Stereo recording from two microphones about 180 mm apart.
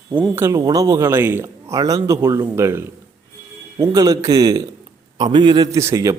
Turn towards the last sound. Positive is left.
turn(degrees=-15)  # may be behind; listen again after turning